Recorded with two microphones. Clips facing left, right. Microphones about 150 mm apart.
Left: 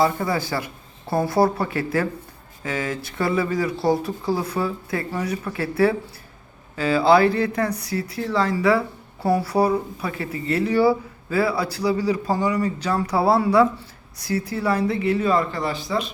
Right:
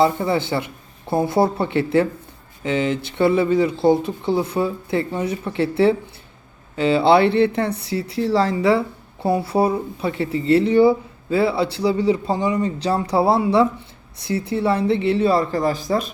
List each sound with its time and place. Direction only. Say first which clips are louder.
0.0 s speech: right 3 dB; 25° right (ahead or behind); by 16.0 s 45° right (ahead or behind)